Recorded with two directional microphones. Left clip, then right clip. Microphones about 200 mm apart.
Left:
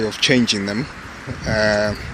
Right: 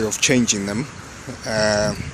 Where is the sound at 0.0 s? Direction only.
5° right (ahead or behind).